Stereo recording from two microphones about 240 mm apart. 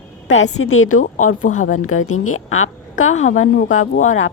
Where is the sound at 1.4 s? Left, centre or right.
Left.